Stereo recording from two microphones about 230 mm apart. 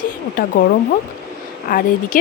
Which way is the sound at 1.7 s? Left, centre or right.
Left.